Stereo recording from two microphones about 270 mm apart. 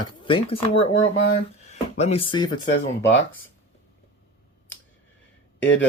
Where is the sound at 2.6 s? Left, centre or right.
Left.